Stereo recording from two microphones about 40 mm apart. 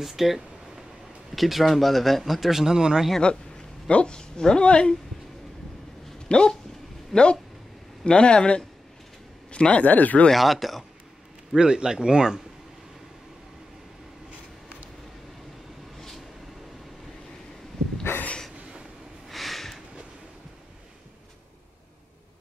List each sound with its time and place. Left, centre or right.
0.0 s speech: centre
3.2 s a sound: left
3.9 s speech: left
6.2 s speech: left
8.0 s speech: left
10.3 s speech: centre
11.5 s speech: centre
19.2 s a sound: centre